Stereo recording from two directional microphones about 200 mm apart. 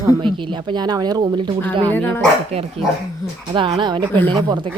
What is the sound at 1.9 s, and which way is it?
Speech, 10° left (ahead or behind).